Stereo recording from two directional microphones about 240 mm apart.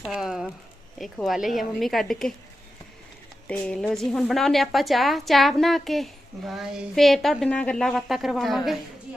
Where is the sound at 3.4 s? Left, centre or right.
Centre.